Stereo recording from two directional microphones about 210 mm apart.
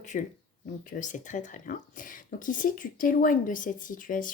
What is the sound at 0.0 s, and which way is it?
Speech, 35° left (ahead or behind).